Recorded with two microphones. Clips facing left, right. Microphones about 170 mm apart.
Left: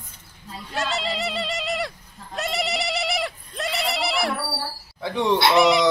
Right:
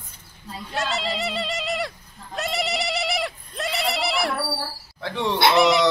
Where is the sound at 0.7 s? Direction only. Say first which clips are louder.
Even; centre (ahead or behind).